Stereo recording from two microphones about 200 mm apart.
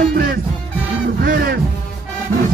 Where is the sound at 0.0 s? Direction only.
45° right (ahead or behind).